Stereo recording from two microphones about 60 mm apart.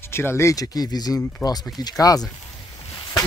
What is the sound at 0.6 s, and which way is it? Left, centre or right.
Speech, left.